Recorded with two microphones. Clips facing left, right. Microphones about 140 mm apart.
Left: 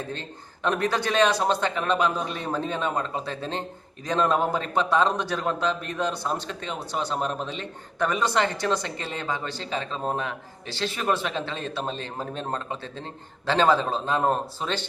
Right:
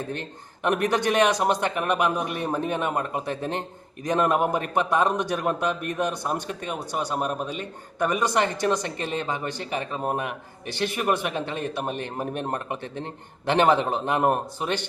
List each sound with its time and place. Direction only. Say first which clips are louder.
0.1 s a man's voice: right 2 dB; 15° right (ahead or behind)